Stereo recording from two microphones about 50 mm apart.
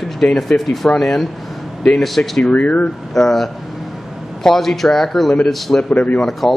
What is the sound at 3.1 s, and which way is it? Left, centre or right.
Speech, centre.